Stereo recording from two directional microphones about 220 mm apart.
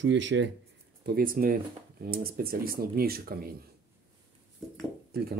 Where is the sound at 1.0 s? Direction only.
40° right (ahead or behind).